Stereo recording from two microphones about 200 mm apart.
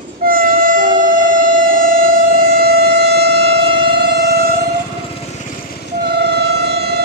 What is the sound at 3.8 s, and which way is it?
Siren, 55° right (ahead or behind).